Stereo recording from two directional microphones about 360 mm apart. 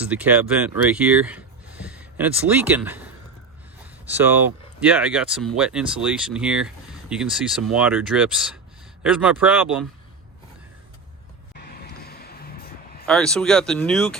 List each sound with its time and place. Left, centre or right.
0.0 s speech: centre
4.1 s speech: centre
11.5 s a sound: left
13.1 s speech: centre